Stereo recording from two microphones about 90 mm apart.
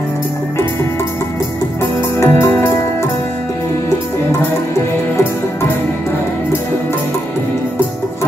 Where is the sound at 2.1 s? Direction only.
30° left (ahead or behind).